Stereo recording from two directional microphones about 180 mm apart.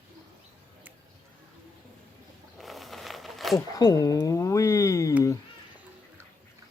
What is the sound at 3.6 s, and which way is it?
Speech, 20° left (ahead or behind).